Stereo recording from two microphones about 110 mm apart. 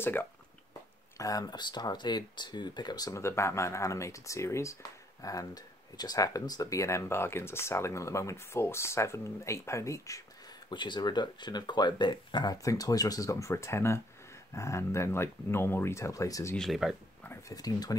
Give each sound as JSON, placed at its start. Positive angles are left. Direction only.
{"t": 1.1, "sound": "speech", "side_deg": 30}
{"t": 10.7, "sound": "speech", "side_deg": 45}
{"t": 16.5, "sound": "speech", "side_deg": 0}
{"t": 17.5, "sound": "speech", "side_deg": 35}